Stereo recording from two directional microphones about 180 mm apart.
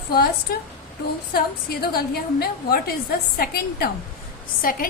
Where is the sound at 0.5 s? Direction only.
60° left (ahead or behind).